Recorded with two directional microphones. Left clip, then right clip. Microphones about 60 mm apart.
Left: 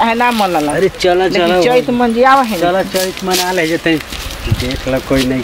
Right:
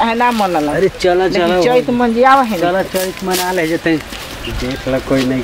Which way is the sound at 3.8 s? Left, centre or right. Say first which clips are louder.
Left 1 dB; centre.